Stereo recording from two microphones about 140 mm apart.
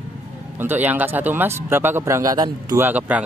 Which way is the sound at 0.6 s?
15° right (ahead or behind).